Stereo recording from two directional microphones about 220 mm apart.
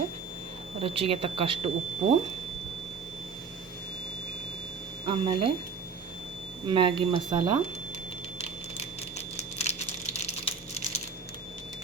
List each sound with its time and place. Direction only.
0.8 s speech: 25° right (ahead or behind)
5.0 s speech: 25° right (ahead or behind)
6.7 s speech: 20° right (ahead or behind)
8.4 s a sound: 30° left (ahead or behind)